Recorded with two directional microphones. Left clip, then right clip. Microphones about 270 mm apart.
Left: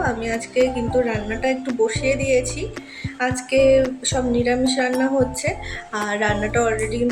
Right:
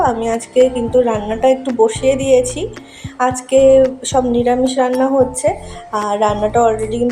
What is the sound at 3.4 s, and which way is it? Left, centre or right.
Speech, right.